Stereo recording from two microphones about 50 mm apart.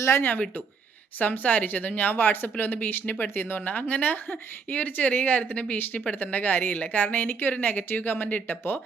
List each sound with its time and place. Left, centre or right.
0.2 s speech: left